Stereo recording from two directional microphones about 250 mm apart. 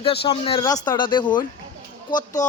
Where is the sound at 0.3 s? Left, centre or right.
Centre.